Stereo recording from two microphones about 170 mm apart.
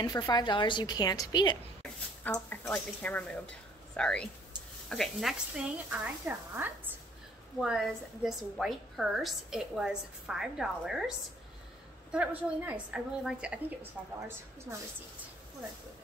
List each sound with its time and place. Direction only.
0.0 s a woman's voice: 25° left (ahead or behind)
2.2 s a woman's voice: 10° left (ahead or behind)
12.1 s a woman's voice: 10° right (ahead or behind)